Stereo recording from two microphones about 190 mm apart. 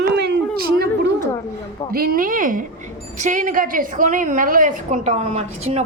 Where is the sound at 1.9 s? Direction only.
50° right (ahead or behind); by 5.8 s 35° right (ahead or behind).